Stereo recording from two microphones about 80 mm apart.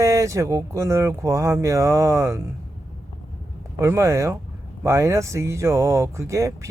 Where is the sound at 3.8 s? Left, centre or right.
Right.